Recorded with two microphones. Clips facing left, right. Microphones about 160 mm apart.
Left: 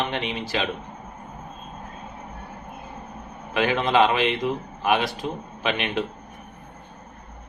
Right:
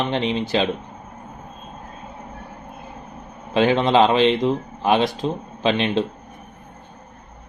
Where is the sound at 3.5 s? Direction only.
30° right (ahead or behind).